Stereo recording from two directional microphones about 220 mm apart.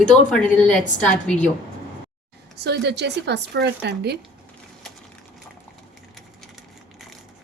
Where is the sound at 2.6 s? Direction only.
50° right (ahead or behind).